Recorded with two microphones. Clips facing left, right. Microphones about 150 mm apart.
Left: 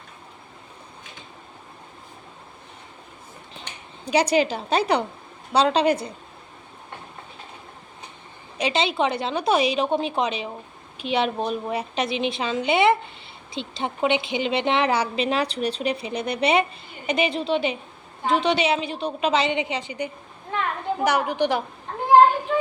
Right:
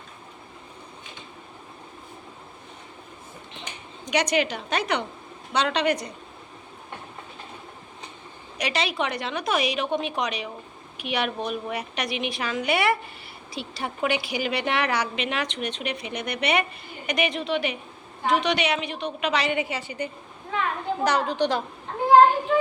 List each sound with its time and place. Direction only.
4.0 s a woman's voice: 30° left (ahead or behind)
8.5 s a woman's voice: 25° left (ahead or behind)